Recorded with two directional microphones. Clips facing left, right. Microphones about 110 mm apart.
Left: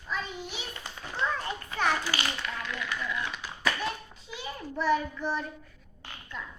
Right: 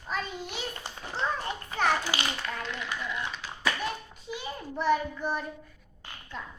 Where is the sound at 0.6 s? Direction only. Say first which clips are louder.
Right 3 dB; 30° right (ahead or behind).